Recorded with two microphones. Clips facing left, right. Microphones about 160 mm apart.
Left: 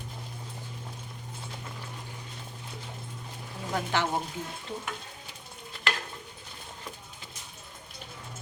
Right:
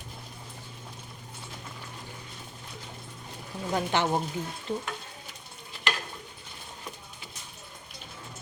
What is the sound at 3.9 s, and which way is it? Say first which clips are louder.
Speech: right 1 dB; 20° right (ahead or behind).